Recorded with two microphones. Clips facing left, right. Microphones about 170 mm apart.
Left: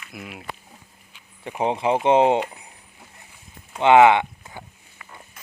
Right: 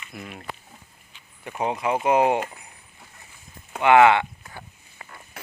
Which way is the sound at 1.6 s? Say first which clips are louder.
Left 3 dB; 30° left (ahead or behind).